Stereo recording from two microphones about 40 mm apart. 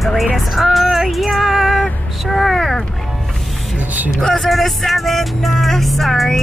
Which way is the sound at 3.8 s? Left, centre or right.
Right.